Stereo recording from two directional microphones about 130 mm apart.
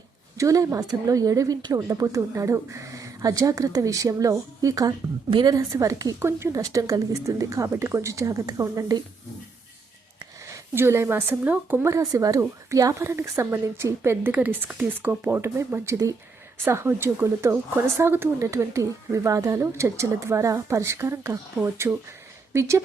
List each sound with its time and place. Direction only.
0.3 s a woman's voice: 25° right (ahead or behind)
10.4 s a woman's voice: 20° right (ahead or behind)